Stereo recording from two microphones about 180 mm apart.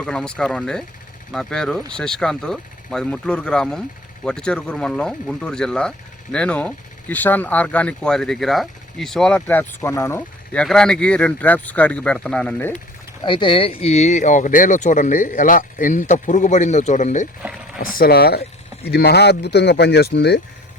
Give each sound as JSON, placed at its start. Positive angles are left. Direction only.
{"t": 0.0, "sound": "speech", "side_deg": 5}
{"t": 13.2, "sound": "speech", "side_deg": 25}
{"t": 17.4, "sound": "speech", "side_deg": -10}
{"t": 17.9, "sound": "speech", "side_deg": 55}